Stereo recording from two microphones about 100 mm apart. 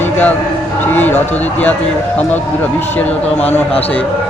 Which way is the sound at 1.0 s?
20° left (ahead or behind).